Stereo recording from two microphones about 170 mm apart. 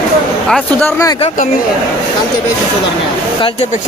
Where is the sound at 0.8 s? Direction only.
15° left (ahead or behind).